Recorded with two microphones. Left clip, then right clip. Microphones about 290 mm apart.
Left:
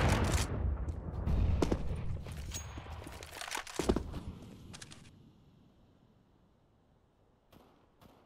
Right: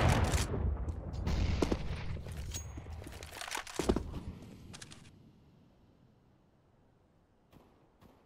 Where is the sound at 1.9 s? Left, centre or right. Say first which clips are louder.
Right 2 dB; right.